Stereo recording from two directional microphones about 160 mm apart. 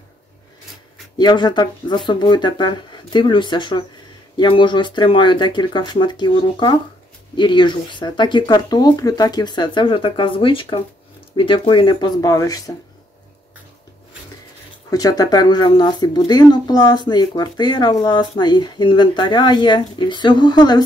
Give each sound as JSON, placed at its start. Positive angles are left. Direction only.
{"t": 1.1, "sound": "speech", "side_deg": 25}
{"t": 14.9, "sound": "speech", "side_deg": 25}